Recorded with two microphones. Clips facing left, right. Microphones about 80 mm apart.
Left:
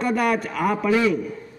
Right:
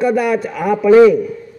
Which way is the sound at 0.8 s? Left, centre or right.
Right.